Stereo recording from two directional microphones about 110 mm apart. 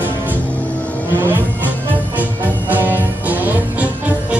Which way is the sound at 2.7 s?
15° right (ahead or behind).